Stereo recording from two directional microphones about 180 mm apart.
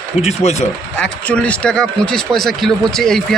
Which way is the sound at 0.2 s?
35° left (ahead or behind).